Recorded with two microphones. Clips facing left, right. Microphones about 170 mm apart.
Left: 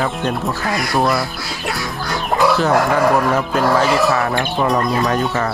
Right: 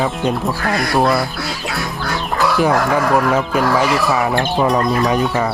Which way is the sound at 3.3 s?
10° right (ahead or behind).